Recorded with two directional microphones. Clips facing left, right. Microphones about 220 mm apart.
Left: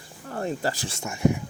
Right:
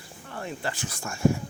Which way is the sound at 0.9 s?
20° left (ahead or behind).